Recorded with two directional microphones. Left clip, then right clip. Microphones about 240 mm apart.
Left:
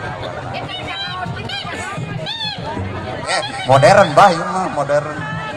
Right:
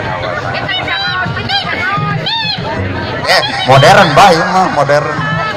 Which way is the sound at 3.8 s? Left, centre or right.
Right.